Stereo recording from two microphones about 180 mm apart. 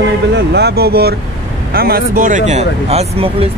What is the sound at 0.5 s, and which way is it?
Speech, 65° right (ahead or behind).